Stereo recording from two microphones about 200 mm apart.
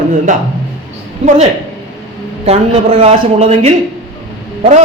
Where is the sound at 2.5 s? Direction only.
30° right (ahead or behind).